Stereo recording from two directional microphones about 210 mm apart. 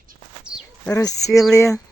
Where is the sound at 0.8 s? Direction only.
15° left (ahead or behind).